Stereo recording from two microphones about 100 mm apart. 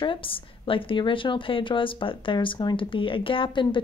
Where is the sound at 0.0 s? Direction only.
60° left (ahead or behind).